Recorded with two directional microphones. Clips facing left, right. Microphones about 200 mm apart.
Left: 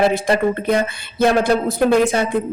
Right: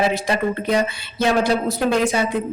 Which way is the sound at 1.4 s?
50° left (ahead or behind).